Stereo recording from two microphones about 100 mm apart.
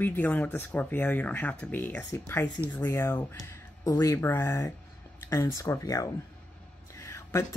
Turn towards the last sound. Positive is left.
turn(degrees=30)  # may be behind; listen again after turning